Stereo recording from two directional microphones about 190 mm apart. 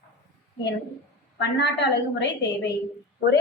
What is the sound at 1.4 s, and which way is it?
A woman's voice, 65° left (ahead or behind).